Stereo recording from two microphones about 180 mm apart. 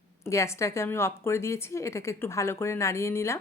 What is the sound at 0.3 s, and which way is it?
A woman's voice, 15° left (ahead or behind).